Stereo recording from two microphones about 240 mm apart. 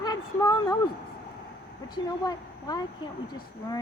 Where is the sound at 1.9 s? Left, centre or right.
Centre.